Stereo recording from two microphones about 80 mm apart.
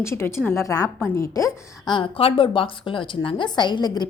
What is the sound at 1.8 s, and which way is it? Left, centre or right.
A woman's voice, left.